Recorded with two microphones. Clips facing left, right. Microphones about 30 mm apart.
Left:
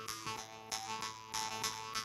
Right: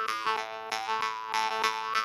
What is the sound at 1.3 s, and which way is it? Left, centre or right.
Boing, right.